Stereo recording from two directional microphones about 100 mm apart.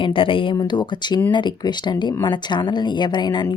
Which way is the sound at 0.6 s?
50° left (ahead or behind).